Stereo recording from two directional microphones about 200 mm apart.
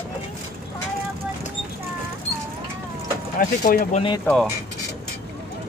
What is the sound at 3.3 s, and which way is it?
Speech, 45° left (ahead or behind).